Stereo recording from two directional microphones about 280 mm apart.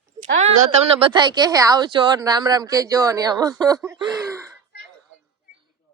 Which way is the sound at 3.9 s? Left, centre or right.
Centre.